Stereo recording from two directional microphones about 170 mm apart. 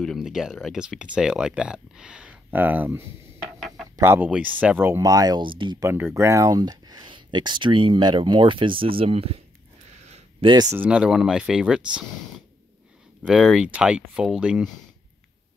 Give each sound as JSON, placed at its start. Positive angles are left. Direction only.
{"t": 0.0, "sound": "speech", "side_deg": 0}
{"t": 6.1, "sound": "speech", "side_deg": -15}
{"t": 10.0, "sound": "a sound", "side_deg": -40}
{"t": 10.5, "sound": "speech", "side_deg": -20}
{"t": 10.8, "sound": "speech", "side_deg": -5}
{"t": 13.2, "sound": "speech", "side_deg": 0}